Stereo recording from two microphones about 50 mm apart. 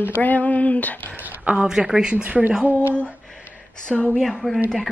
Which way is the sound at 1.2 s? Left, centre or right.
Right.